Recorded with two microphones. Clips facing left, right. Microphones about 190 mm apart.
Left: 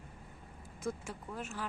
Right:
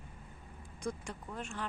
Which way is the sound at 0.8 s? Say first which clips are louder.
Left 1 dB; 5° left (ahead or behind).